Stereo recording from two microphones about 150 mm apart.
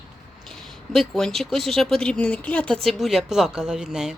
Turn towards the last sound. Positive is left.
turn(degrees=-5)  # may be behind; listen again after turning